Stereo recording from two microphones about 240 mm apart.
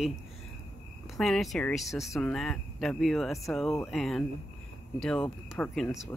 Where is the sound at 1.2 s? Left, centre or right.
Centre.